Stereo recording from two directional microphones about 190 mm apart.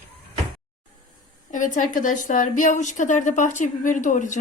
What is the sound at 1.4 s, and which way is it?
A woman's voice, 40° left (ahead or behind).